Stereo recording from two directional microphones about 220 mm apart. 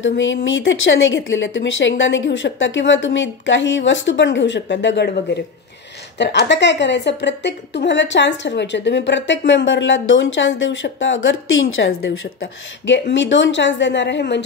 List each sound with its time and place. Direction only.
0.0 s a woman's voice: 55° left (ahead or behind)